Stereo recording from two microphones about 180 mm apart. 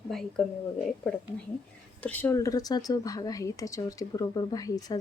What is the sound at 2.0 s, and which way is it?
A woman's voice, 10° left (ahead or behind).